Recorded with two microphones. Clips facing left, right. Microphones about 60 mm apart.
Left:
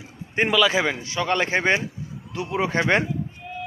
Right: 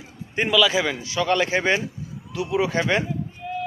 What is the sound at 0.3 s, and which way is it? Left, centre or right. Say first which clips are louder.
Speech: even; left.